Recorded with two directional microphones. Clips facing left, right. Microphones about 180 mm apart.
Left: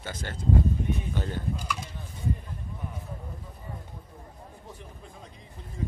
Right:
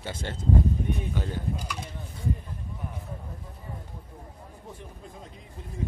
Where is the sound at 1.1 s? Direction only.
10° right (ahead or behind).